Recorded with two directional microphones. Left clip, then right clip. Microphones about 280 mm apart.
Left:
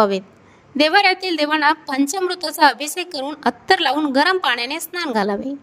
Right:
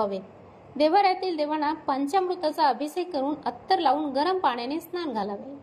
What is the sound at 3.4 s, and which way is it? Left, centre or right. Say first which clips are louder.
Speech: left 12 dB; left.